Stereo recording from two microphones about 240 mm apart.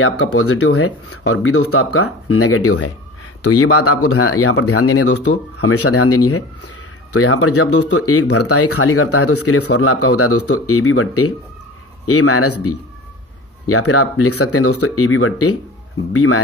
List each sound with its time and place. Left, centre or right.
0.0 s speech: left